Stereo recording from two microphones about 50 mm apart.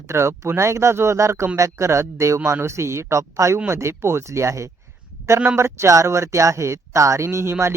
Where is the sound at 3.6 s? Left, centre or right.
Right.